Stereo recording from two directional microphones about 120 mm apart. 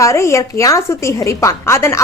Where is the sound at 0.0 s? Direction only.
25° left (ahead or behind).